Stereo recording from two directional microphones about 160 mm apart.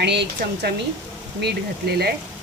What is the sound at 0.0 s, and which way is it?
Speech, 90° right.